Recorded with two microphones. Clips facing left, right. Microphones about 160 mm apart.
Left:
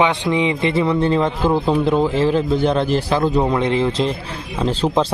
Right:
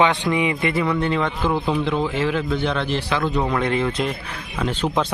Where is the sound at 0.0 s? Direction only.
25° left (ahead or behind).